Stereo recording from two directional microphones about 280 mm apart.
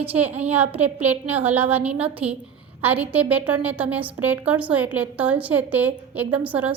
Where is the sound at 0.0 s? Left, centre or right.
Centre.